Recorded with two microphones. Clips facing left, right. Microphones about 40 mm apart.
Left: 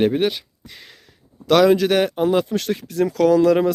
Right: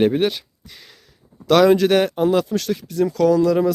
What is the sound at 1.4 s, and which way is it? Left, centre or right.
Speech, centre.